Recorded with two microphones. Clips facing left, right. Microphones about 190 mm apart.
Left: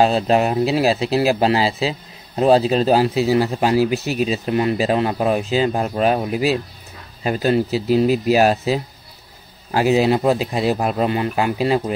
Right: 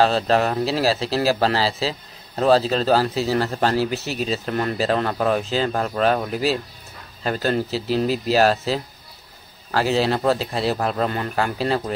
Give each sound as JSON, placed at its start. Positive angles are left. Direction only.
{"t": 0.0, "sound": "a man's voice", "side_deg": 15}